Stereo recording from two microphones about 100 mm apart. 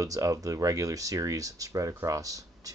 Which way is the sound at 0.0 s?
35° right (ahead or behind).